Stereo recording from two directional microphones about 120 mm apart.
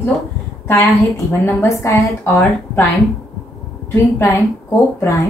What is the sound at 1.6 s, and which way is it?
A woman's voice, 20° left (ahead or behind).